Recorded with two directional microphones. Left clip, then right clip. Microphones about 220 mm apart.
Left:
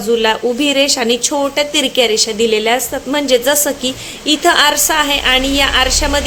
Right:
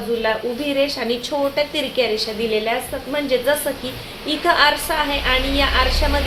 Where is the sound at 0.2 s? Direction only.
45° left (ahead or behind).